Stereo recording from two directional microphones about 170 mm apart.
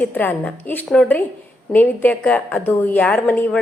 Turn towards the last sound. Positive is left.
turn(degrees=10)  # may be behind; listen again after turning